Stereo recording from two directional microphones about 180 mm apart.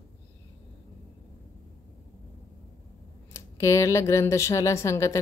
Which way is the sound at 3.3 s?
15° left (ahead or behind).